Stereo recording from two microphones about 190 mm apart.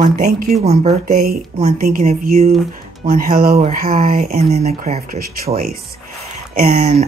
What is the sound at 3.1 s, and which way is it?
Speech, 45° right (ahead or behind).